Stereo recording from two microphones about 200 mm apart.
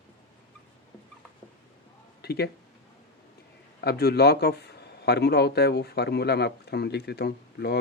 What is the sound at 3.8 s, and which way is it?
Speech, 50° left (ahead or behind).